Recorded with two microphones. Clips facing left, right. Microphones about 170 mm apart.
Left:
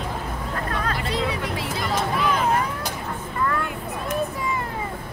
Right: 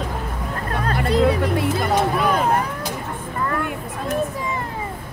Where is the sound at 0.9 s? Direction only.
55° right (ahead or behind).